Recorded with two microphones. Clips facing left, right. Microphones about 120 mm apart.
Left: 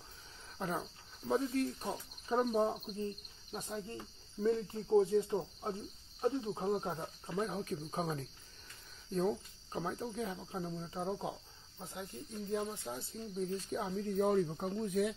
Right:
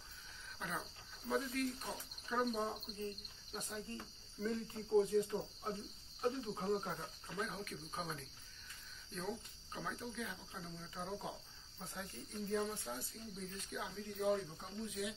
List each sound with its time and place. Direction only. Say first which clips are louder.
0.6 s speech: left 7 dB; 30° left (ahead or behind)
3.5 s cricket: left 4 dB; 25° left (ahead or behind)
9.1 s speech: left 10 dB; 35° left (ahead or behind)
11.8 s cricket: left 4 dB; 20° left (ahead or behind)
13.4 s speech: left 10 dB; 35° left (ahead or behind)